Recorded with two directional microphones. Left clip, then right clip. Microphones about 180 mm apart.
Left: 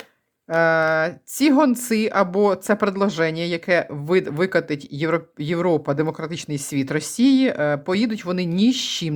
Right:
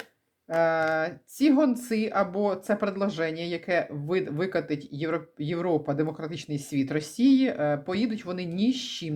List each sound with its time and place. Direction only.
0.5 s a woman's voice: 35° left (ahead or behind)